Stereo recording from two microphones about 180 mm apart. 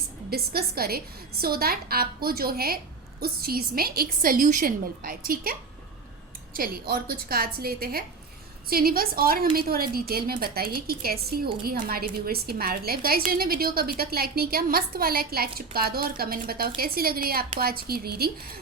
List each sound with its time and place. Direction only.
0.3 s a woman's voice: 60° right (ahead or behind)